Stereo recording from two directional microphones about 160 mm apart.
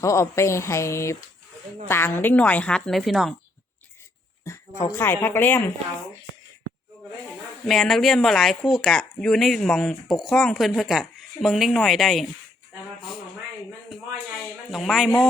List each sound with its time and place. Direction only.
0.0 s a woman's voice: 20° left (ahead or behind); by 3.3 s centre (ahead or behind)
4.4 s a woman's voice: 20° left (ahead or behind)
7.6 s speech: centre (ahead or behind)
14.7 s speech: centre (ahead or behind)